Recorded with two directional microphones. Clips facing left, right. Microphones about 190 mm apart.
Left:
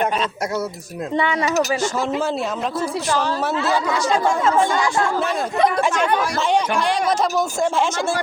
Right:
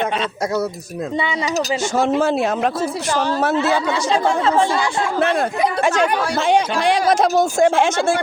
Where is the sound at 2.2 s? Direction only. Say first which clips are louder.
Right 5 dB; 70° right (ahead or behind).